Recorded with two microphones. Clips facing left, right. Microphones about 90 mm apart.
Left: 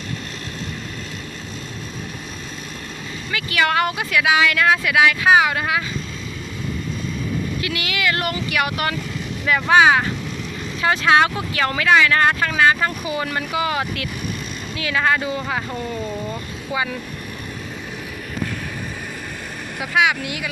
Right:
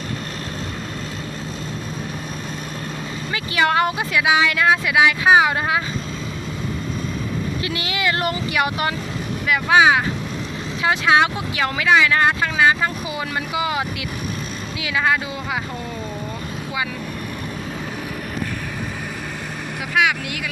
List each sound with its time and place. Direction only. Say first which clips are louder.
3.3 s speech: right 1 dB; 25° right (ahead or behind)
7.6 s speech: right 1 dB; 30° right (ahead or behind)
9.5 s speech: left 1 dB; 5° right (ahead or behind)